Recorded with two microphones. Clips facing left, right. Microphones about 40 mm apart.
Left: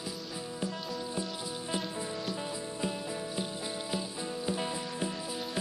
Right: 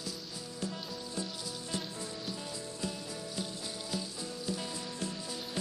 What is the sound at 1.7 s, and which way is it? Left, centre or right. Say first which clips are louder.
Rain on surface: left 5 dB; left.